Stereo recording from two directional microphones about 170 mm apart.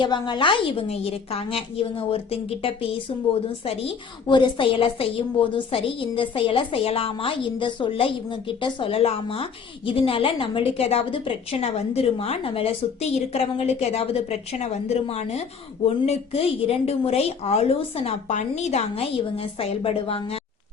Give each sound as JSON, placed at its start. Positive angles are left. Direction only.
{"t": 0.0, "sound": "a woman's voice", "side_deg": 25}